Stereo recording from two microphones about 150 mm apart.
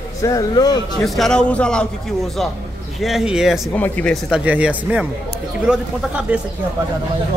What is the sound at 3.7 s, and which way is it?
Speech, 10° left (ahead or behind).